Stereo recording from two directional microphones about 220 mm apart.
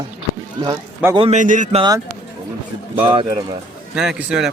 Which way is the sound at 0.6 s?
20° right (ahead or behind).